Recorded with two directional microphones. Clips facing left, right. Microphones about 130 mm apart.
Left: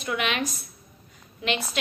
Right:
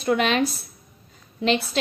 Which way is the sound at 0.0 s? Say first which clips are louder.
Right 7 dB; 35° right (ahead or behind).